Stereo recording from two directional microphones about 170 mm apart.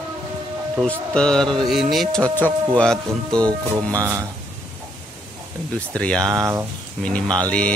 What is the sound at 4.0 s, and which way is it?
Speech, 20° right (ahead or behind).